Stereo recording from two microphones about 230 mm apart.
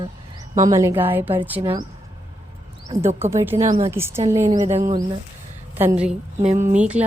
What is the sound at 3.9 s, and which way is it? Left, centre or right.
Speech, centre.